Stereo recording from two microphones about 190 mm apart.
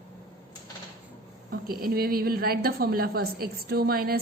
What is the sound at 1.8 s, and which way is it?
A woman's voice, 55° right (ahead or behind).